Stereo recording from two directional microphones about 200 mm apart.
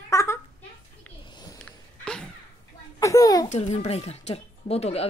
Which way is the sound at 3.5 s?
35° left (ahead or behind).